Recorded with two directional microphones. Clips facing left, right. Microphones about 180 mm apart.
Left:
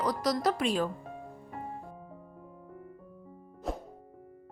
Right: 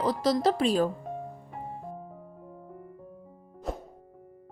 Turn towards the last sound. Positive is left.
turn(degrees=0)  # may be behind; listen again after turning